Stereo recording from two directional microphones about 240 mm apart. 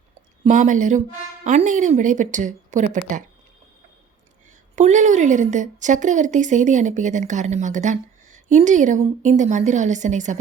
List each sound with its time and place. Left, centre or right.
0.4 s a woman's voice: right
4.7 s a woman's voice: right